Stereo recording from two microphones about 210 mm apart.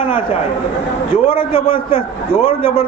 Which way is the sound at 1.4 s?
25° left (ahead or behind).